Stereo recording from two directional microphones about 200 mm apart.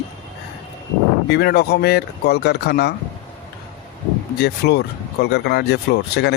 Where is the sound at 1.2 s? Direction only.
55° left (ahead or behind).